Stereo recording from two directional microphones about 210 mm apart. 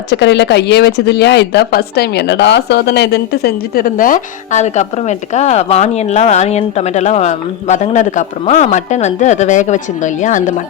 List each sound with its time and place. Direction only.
0.1 s speech: 55° left (ahead or behind); by 10.5 s 35° left (ahead or behind)